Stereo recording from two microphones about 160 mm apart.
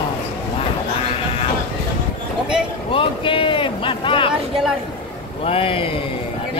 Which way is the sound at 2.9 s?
35° left (ahead or behind).